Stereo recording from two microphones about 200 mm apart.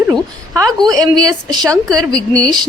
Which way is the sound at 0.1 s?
20° right (ahead or behind).